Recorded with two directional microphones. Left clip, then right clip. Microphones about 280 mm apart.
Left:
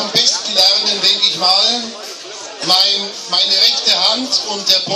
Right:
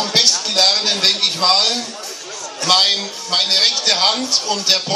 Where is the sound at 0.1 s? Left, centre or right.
Centre.